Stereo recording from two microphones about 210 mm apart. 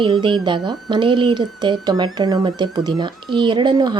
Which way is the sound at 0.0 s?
25° right (ahead or behind).